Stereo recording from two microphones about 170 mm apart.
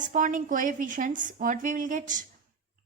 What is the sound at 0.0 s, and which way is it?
Speech, 50° right (ahead or behind).